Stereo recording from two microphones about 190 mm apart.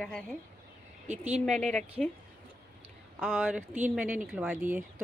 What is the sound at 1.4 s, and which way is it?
Speech, 5° left (ahead or behind).